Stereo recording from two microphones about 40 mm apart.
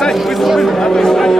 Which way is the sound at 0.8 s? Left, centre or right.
Centre.